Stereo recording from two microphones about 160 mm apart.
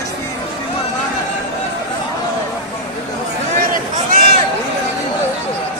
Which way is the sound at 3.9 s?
55° right (ahead or behind).